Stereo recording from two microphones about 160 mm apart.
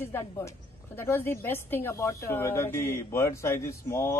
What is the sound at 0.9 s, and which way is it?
A woman's voice, 15° left (ahead or behind).